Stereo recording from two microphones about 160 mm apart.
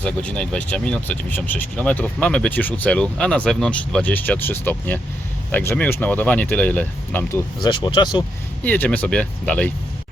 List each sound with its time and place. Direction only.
0.0 s speech: 5° left (ahead or behind)
7.6 s speech: 30° left (ahead or behind)
8.6 s speech: 10° left (ahead or behind)